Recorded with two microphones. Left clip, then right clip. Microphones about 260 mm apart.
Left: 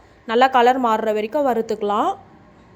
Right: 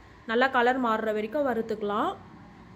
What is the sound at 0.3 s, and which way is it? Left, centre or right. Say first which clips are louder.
A woman's voice: left 9 dB; centre.